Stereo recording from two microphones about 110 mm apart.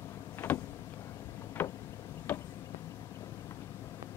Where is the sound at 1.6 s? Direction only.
15° left (ahead or behind).